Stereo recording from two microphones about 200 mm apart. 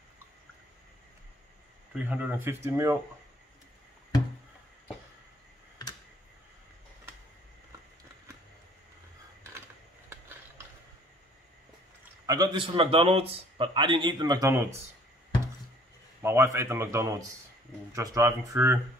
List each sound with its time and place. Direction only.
2.0 s a man's voice: 5° right (ahead or behind)
12.3 s a man's voice: 20° right (ahead or behind)
16.2 s a man's voice: 15° right (ahead or behind)